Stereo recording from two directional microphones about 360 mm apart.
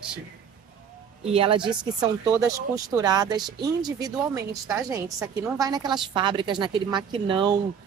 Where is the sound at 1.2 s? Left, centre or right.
Centre.